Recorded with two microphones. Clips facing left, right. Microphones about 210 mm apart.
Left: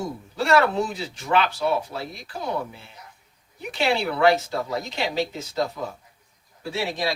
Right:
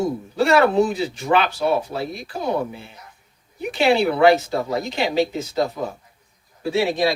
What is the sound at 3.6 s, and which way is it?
Speech, 10° right (ahead or behind).